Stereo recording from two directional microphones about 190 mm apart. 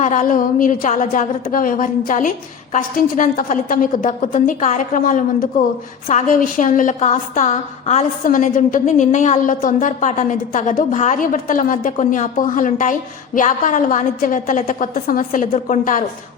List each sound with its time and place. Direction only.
0.0 s a woman's voice: 40° left (ahead or behind)